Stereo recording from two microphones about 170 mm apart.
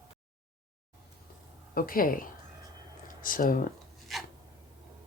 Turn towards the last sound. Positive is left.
turn(degrees=0)  # may be behind; listen again after turning